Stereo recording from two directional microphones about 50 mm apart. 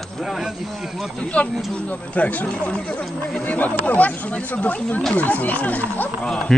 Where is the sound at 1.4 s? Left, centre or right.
Left.